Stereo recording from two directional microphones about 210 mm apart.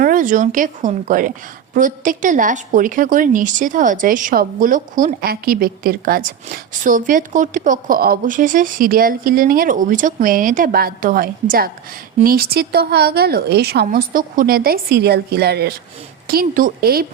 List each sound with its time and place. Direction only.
0.0 s a woman's voice: 40° right (ahead or behind)